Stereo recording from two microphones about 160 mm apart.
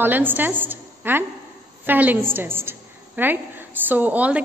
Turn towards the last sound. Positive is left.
turn(degrees=-10)  # may be behind; listen again after turning